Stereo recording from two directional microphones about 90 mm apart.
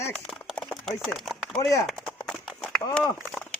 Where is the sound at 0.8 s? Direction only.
5° left (ahead or behind).